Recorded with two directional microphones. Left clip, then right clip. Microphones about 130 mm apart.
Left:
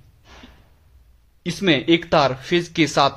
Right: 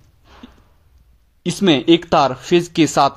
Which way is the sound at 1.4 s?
30° right (ahead or behind).